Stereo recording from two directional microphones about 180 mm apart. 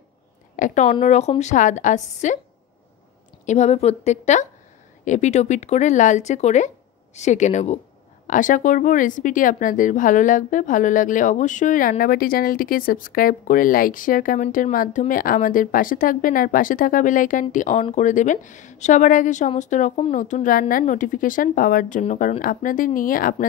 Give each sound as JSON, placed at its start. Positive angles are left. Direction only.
{"t": 0.6, "sound": "speech", "side_deg": 45}
{"t": 3.4, "sound": "speech", "side_deg": 40}